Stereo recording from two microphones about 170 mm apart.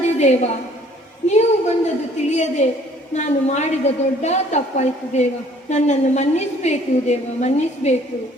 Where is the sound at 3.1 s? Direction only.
40° left (ahead or behind).